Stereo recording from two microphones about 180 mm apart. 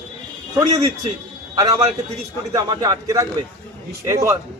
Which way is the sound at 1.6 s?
20° right (ahead or behind).